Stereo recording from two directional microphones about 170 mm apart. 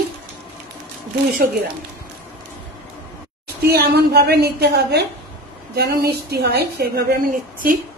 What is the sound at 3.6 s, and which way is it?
A woman's voice, 70° right (ahead or behind).